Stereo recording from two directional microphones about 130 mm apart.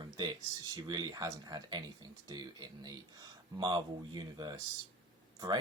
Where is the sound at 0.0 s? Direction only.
30° right (ahead or behind).